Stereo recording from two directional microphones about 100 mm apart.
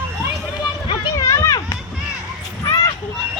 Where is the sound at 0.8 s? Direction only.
50° left (ahead or behind).